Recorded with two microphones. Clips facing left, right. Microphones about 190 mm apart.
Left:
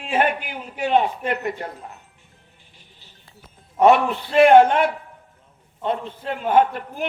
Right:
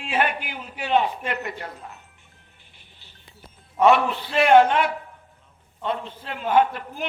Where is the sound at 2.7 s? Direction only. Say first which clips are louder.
Left 2 dB; 40° left (ahead or behind).